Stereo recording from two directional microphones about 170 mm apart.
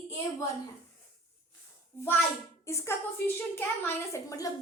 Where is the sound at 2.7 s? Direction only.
15° left (ahead or behind).